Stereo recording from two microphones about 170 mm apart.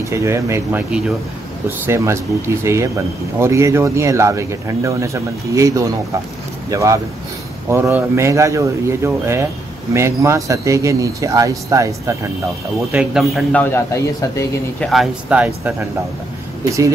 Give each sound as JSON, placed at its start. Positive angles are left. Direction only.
{"t": 0.0, "sound": "speech", "side_deg": -15}
{"t": 12.9, "sound": "a man's voice", "side_deg": -5}
{"t": 14.8, "sound": "speech", "side_deg": 0}